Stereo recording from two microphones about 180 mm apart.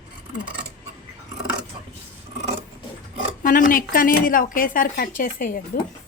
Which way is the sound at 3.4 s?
50° left (ahead or behind).